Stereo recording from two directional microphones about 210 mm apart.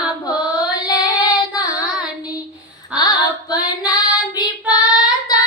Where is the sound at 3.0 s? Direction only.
20° left (ahead or behind).